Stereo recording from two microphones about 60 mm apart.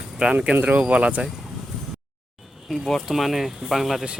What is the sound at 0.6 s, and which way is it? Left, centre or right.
Speech, right.